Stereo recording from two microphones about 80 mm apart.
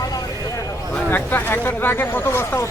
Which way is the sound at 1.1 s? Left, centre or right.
Left.